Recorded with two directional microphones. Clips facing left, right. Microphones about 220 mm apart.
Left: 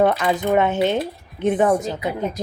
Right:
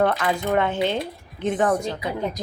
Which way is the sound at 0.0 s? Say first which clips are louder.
Left 3 dB; 15° left (ahead or behind).